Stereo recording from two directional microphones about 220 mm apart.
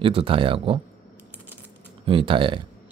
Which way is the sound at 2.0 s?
25° right (ahead or behind).